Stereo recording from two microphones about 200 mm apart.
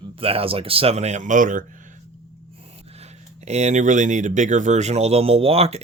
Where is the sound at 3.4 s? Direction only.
35° right (ahead or behind).